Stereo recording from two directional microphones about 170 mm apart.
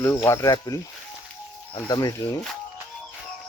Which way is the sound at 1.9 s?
20° left (ahead or behind).